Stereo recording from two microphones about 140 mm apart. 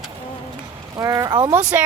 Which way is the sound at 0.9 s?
25° right (ahead or behind).